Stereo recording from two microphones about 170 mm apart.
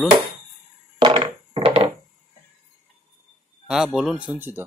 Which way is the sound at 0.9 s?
30° right (ahead or behind).